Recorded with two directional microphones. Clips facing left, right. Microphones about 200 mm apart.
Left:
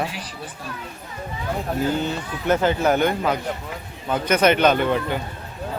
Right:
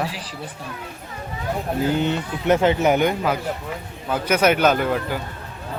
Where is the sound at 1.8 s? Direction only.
20° right (ahead or behind); by 5.2 s 5° right (ahead or behind).